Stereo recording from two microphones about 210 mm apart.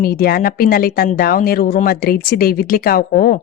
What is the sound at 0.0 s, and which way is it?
Speech, 45° left (ahead or behind).